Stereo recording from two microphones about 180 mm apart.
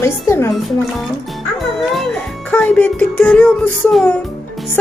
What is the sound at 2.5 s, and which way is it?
Speech, 10° left (ahead or behind).